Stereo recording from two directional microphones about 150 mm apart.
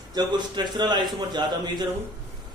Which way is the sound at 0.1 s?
30° right (ahead or behind).